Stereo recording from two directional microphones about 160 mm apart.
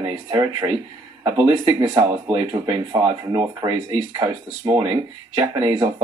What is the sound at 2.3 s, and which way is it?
Speech, 25° right (ahead or behind).